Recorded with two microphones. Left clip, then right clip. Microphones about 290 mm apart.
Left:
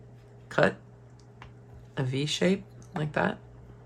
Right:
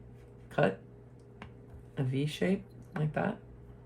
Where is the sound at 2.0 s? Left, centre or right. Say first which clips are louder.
Left 5 dB; centre.